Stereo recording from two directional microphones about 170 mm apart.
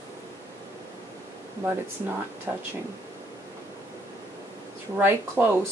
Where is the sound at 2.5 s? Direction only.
10° right (ahead or behind).